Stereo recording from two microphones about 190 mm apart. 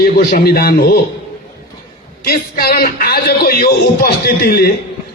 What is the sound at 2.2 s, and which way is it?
A man's voice, 55° left (ahead or behind).